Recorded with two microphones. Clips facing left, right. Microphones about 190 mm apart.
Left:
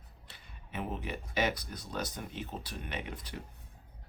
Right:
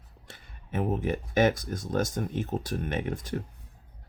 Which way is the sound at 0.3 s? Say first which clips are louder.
Right 10 dB; 50° right (ahead or behind).